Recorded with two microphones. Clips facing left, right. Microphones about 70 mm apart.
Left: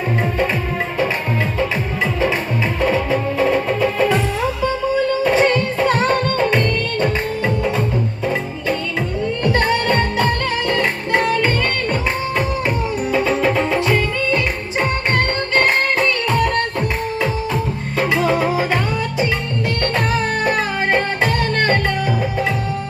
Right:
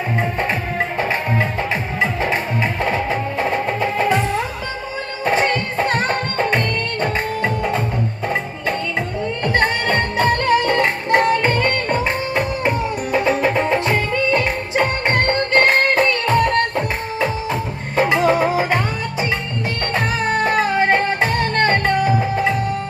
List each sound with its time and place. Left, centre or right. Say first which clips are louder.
2.9 s music: left 2 dB; right
5.2 s music: right 1 dB; right
9.4 s music: left 1 dB; right
16.0 s music: right 1 dB; right; by 18.8 s centre
20.3 s music: right 2 dB; right